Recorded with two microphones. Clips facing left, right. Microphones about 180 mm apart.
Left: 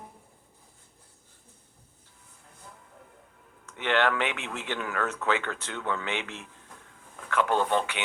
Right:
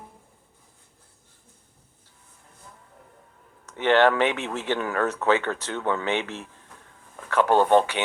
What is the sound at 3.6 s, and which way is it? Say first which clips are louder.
Speech: right 7 dB; 40° right (ahead or behind).